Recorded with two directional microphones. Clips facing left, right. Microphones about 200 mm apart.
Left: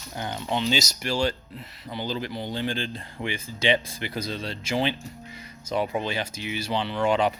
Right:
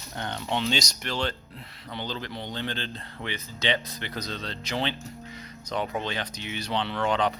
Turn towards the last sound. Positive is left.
turn(degrees=10)  # may be behind; listen again after turning